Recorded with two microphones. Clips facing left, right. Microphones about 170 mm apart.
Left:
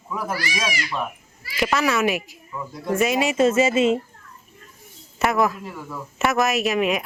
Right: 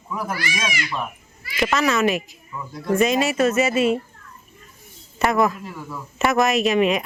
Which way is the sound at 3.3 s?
25° left (ahead or behind).